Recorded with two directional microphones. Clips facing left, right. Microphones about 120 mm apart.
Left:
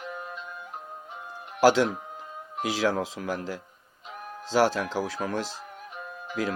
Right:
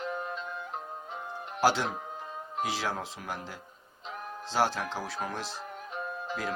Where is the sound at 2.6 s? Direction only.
90° left.